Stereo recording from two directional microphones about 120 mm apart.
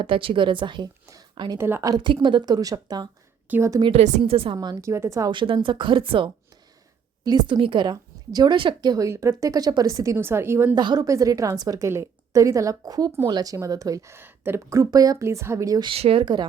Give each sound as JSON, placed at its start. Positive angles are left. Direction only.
{"t": 0.0, "sound": "speech", "side_deg": -45}
{"t": 1.5, "sound": "a woman's voice", "side_deg": -20}
{"t": 1.9, "sound": "a woman's voice", "side_deg": -40}
{"t": 3.9, "sound": "a woman's voice", "side_deg": -90}
{"t": 4.2, "sound": "speech", "side_deg": -50}
{"t": 4.5, "sound": "a woman's voice", "side_deg": -30}
{"t": 5.3, "sound": "a woman's voice", "side_deg": -40}
{"t": 10.8, "sound": "a woman's voice", "side_deg": -35}
{"t": 15.9, "sound": "speech", "side_deg": -50}
{"t": 16.2, "sound": "a woman's voice", "side_deg": -40}